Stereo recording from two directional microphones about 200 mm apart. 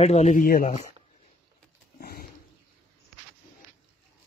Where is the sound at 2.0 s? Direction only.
50° left (ahead or behind).